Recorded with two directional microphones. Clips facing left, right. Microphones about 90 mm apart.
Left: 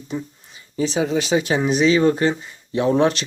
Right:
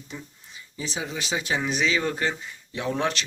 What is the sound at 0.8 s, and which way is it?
Speech, 65° left (ahead or behind).